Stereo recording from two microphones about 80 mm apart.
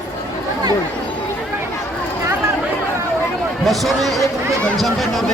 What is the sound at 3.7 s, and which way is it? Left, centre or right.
A man's voice, centre.